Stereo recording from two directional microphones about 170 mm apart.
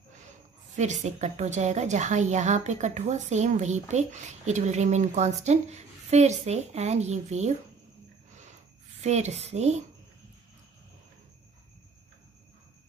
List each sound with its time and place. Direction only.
0.7 s a woman's voice: 45° right (ahead or behind)
9.0 s a woman's voice: 40° right (ahead or behind)